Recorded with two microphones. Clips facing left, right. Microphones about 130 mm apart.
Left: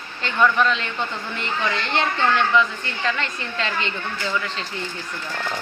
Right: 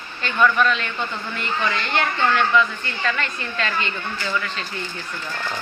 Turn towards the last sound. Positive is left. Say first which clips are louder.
# right 1 dB
turn(degrees=20)  # may be behind; listen again after turning